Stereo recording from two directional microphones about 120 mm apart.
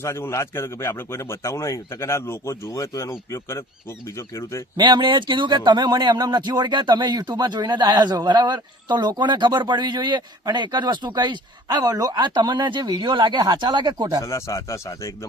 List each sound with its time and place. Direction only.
0.0 s speech: 25° left (ahead or behind)
4.8 s speech: 40° right (ahead or behind)
14.3 s speech: 25° left (ahead or behind)